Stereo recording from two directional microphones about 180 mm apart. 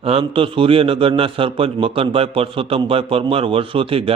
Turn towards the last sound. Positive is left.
turn(degrees=-30)  # may be behind; listen again after turning